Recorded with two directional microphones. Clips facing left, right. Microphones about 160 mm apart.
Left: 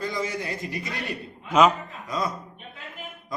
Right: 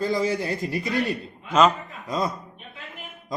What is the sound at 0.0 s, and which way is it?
Speech, 35° right (ahead or behind).